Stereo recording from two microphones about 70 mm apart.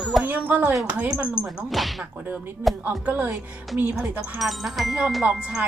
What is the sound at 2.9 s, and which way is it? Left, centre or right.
Speech, right.